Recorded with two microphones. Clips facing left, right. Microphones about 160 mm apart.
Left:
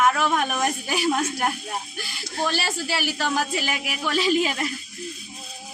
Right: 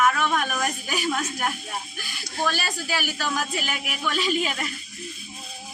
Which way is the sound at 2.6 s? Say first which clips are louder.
Left 2 dB; 30° left (ahead or behind).